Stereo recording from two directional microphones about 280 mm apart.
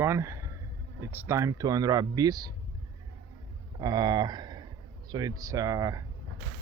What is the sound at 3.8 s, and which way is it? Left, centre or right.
Speech, centre.